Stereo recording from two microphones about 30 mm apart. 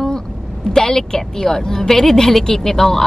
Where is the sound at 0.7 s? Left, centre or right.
Centre.